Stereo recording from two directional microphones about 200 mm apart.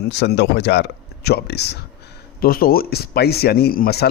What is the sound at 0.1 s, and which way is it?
Speech, 55° left (ahead or behind).